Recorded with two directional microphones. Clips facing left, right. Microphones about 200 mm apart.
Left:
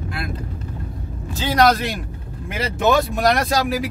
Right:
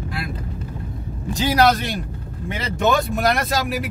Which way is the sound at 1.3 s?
15° right (ahead or behind).